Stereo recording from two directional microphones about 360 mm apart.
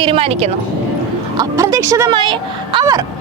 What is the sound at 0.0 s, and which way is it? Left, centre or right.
Speech, centre.